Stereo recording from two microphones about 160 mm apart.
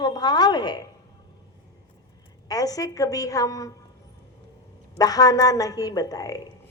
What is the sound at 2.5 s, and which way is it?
A woman's voice, 25° left (ahead or behind).